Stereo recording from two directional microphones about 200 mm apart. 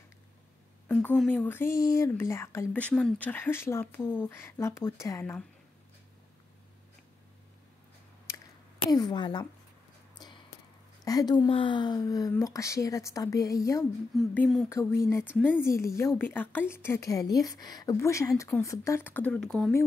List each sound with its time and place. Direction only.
0.8 s a woman's voice: 5° left (ahead or behind)
8.9 s a woman's voice: 20° left (ahead or behind)
10.1 s a sound: 20° left (ahead or behind)
11.1 s speech: 20° left (ahead or behind)
14.1 s speech: 5° left (ahead or behind)
15.3 s speech: centre (ahead or behind)
15.6 s speech: 15° left (ahead or behind)